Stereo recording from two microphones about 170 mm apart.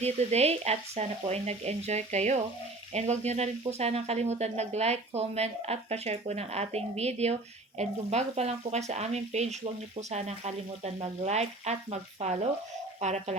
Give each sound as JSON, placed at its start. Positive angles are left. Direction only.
{"t": 0.0, "sound": "speech", "side_deg": -40}